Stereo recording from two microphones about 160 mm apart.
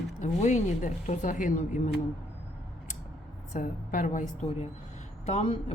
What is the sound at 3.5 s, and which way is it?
A woman's voice, 55° left (ahead or behind).